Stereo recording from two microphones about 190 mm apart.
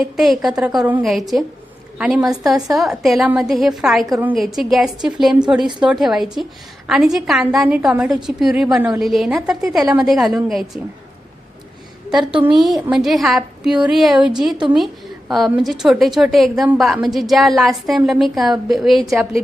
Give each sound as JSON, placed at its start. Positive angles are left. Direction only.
{"t": 0.0, "sound": "a woman's voice", "side_deg": 0}
{"t": 12.3, "sound": "a woman's voice", "side_deg": -30}
{"t": 12.5, "sound": "a woman's voice", "side_deg": 0}